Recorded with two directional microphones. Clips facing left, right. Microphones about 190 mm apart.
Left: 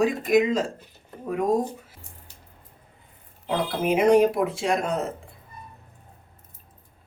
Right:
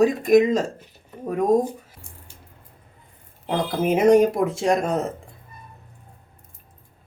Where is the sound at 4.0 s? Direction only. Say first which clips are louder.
Right 2 dB; 45° right (ahead or behind).